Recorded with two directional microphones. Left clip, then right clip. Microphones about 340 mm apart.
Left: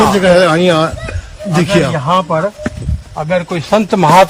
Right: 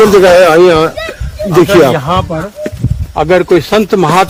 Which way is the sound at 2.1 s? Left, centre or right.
Centre.